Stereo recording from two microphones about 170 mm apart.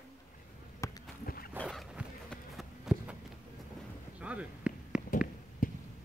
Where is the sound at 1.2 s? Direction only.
60° left (ahead or behind).